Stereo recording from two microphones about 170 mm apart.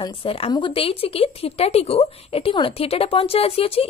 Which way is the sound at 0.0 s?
30° left (ahead or behind).